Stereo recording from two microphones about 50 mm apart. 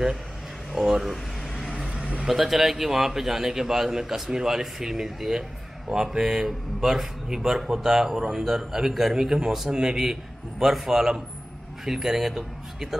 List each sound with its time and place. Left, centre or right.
0.7 s speech: centre
1.8 s vehicle: right
2.2 s speech: centre